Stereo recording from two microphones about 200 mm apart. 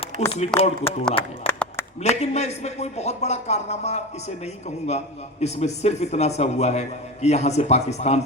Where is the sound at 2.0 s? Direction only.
35° left (ahead or behind).